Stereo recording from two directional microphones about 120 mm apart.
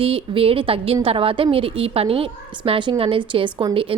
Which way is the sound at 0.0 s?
50° right (ahead or behind).